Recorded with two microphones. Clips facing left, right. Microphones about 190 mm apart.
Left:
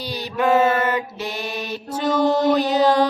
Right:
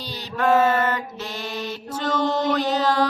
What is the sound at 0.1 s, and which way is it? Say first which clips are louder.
Mantra: left 1 dB; 15° left (ahead or behind).